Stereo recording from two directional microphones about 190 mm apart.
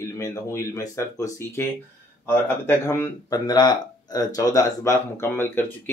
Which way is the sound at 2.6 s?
15° left (ahead or behind).